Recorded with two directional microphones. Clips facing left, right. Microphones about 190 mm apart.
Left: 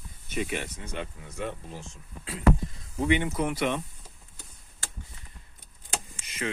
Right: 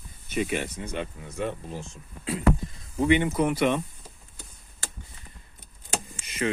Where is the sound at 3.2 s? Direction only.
50° right (ahead or behind).